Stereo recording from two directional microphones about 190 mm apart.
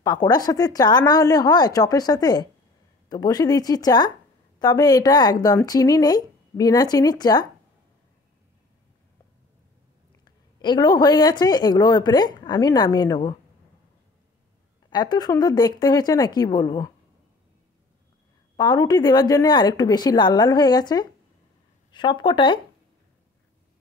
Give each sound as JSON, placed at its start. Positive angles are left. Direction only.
{"t": 0.0, "sound": "a woman's voice", "side_deg": 20}
{"t": 10.2, "sound": "a woman's voice", "side_deg": 20}
{"t": 14.9, "sound": "a woman's voice", "side_deg": 20}
{"t": 18.6, "sound": "a woman's voice", "side_deg": 20}